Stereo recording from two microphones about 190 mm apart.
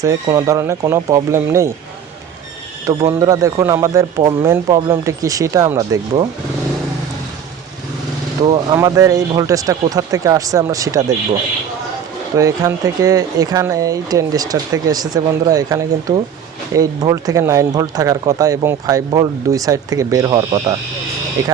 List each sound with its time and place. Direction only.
0.0 s speech: 15° right (ahead or behind)
2.8 s speech: 15° right (ahead or behind)
8.4 s speech: 20° right (ahead or behind)
12.4 s speech: 15° right (ahead or behind)